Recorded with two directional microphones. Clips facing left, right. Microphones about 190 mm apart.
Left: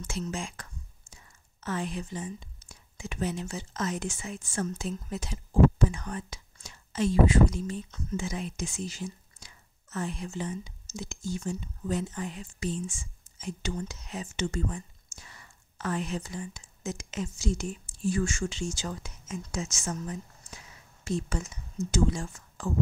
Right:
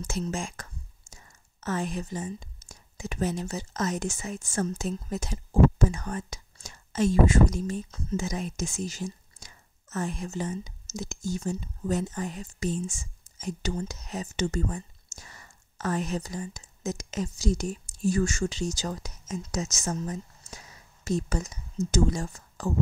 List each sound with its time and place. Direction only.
0.0 s speech: 40° right (ahead or behind)